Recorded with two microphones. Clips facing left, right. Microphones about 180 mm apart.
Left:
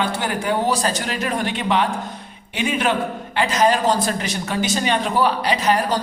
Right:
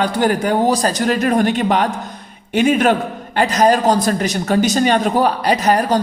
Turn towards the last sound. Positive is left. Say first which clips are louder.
# right 4 dB
turn(degrees=-45)  # may be behind; listen again after turning